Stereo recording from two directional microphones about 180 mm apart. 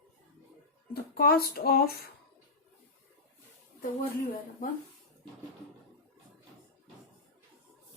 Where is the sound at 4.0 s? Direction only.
50° left (ahead or behind).